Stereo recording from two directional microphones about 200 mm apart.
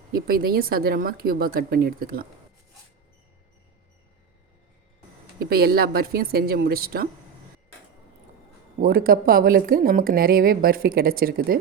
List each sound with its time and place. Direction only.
0.1 s speech: 50° right (ahead or behind)
5.4 s speech: 50° right (ahead or behind)
8.8 s speech: 45° right (ahead or behind)